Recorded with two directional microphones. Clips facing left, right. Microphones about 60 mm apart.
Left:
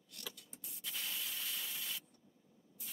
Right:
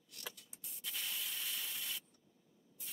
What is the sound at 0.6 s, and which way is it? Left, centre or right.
Sanding, centre.